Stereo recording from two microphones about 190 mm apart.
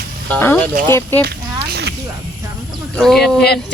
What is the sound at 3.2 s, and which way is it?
Speech, 60° left (ahead or behind).